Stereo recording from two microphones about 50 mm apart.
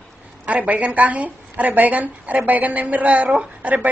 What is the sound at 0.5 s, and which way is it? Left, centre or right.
A woman's voice, right.